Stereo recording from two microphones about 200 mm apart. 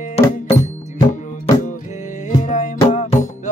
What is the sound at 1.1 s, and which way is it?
Music, 35° left (ahead or behind).